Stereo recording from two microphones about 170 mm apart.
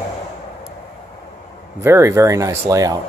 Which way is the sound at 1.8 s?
15° right (ahead or behind).